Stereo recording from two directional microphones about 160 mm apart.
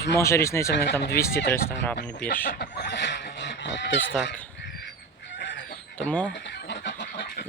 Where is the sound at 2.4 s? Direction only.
90° left.